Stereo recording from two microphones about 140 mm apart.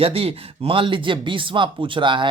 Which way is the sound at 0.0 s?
45° right (ahead or behind).